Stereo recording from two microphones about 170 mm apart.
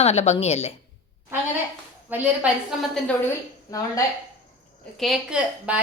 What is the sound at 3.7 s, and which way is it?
Speech, 20° left (ahead or behind).